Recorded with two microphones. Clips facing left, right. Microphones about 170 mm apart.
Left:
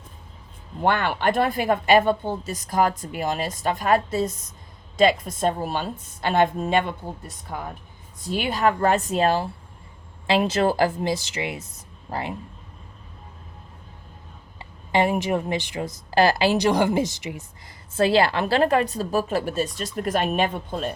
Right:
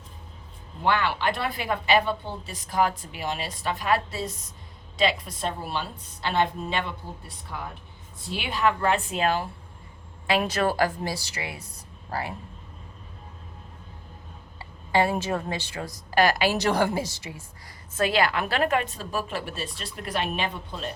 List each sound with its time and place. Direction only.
0.9 s a woman's voice: 50° left (ahead or behind)
10.2 s a woman's voice: 25° left (ahead or behind)
14.6 s a woman's voice: 20° left (ahead or behind)
17.9 s a woman's voice: 30° left (ahead or behind); by 20.9 s 50° left (ahead or behind)